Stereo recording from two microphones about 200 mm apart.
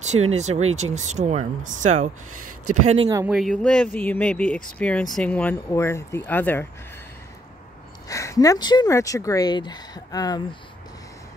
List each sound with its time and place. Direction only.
0.0 s speech: 35° right (ahead or behind)
3.3 s speech: centre (ahead or behind)
8.1 s speech: 15° left (ahead or behind)